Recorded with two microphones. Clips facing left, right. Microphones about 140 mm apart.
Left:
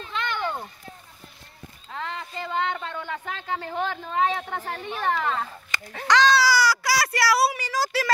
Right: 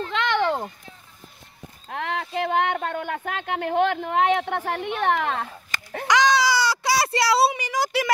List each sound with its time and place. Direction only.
0.0 s a sound: 90° right
1.9 s speech: 65° right (ahead or behind)
6.0 s baby cry: 15° right (ahead or behind)